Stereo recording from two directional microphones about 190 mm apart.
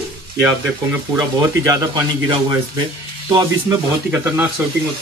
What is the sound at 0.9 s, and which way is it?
Speech, 20° right (ahead or behind).